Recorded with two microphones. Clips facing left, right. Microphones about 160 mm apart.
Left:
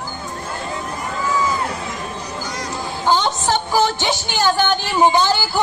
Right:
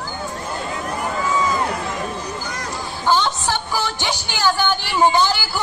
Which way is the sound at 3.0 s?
15° left (ahead or behind).